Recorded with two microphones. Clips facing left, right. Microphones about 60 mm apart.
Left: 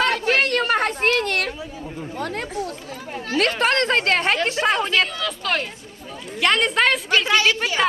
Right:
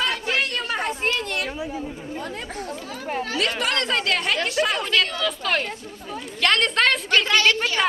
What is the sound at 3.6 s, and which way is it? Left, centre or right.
A woman's voice, left.